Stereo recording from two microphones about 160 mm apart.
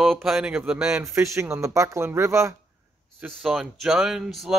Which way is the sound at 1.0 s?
20° right (ahead or behind).